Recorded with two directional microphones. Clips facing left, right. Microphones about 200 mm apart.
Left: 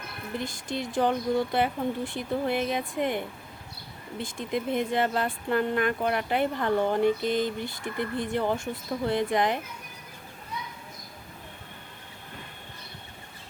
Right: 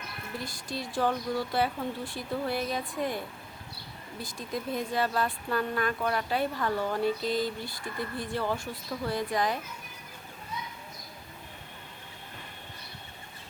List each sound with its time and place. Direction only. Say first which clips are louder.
0.3 s speech: left 5 dB; 20° left (ahead or behind)